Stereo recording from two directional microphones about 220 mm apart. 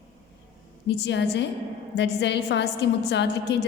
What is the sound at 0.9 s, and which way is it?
A woman's voice, 50° left (ahead or behind).